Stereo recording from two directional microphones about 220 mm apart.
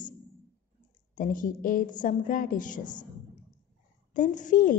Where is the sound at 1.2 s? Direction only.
40° left (ahead or behind).